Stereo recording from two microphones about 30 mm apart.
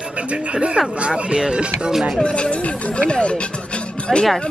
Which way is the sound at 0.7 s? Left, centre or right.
Right.